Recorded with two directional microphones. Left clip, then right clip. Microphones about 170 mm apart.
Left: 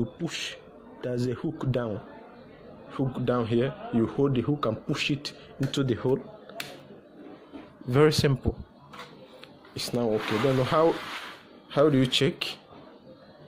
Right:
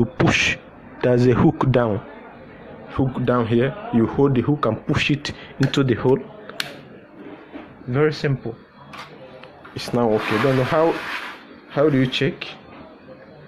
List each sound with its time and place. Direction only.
0.0 s a man's voice: 20° right (ahead or behind); by 6.5 s centre (ahead or behind)
7.9 s a man's voice: 40° left (ahead or behind)
9.8 s speech: 5° left (ahead or behind)
10.6 s speech: 15° left (ahead or behind)
11.7 s speech: 25° left (ahead or behind)